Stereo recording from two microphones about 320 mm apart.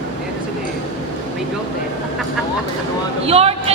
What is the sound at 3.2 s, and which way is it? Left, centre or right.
Speech, centre.